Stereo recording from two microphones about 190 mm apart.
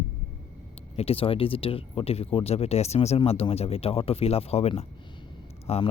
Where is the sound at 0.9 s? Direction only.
30° left (ahead or behind).